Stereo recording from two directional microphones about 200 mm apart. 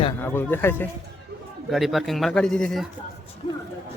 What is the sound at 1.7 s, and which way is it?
Speech, centre (ahead or behind).